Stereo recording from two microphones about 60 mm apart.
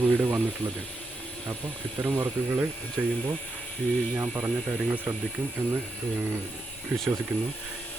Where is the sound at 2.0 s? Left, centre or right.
Right.